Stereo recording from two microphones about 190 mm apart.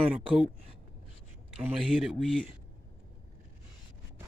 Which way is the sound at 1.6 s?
Centre (ahead or behind).